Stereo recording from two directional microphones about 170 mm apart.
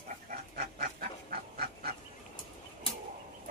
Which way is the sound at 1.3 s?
65° right (ahead or behind).